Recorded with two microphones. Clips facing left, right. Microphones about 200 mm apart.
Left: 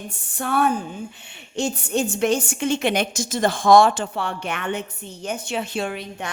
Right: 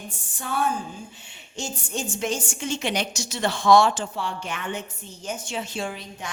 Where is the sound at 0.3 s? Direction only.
65° left (ahead or behind).